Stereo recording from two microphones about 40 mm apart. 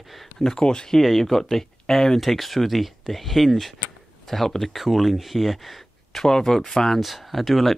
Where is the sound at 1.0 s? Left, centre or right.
Centre.